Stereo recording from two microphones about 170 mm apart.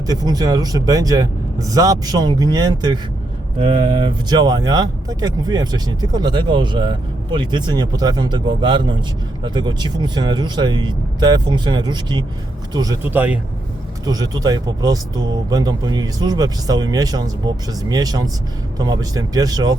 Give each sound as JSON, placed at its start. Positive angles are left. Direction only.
{"t": 0.1, "sound": "speech", "side_deg": -25}
{"t": 3.6, "sound": "speech", "side_deg": -35}
{"t": 13.0, "sound": "speech", "side_deg": -10}
{"t": 14.0, "sound": "speech", "side_deg": -20}